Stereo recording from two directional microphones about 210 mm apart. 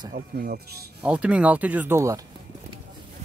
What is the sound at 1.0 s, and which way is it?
Speech, 5° right (ahead or behind).